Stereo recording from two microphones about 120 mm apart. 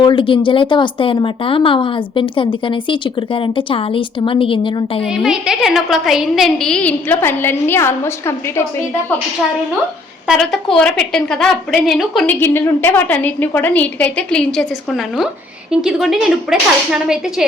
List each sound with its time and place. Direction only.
0.0 s speech: 45° left (ahead or behind)
5.0 s a woman's voice: 5° right (ahead or behind); by 8.6 s 20° left (ahead or behind)
10.2 s a woman's voice: centre (ahead or behind)
12.3 s a woman's voice: 15° left (ahead or behind); by 17.4 s 5° right (ahead or behind)